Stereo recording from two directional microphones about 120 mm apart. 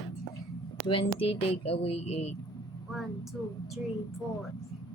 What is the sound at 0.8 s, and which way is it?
Speech, 50° left (ahead or behind).